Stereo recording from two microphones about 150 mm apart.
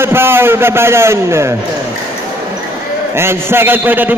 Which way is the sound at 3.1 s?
15° right (ahead or behind).